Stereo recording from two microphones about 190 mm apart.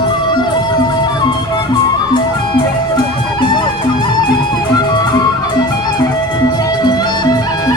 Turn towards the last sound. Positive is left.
turn(degrees=20)  # may be behind; listen again after turning